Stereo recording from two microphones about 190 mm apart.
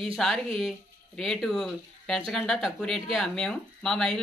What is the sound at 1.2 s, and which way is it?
Speech, centre (ahead or behind).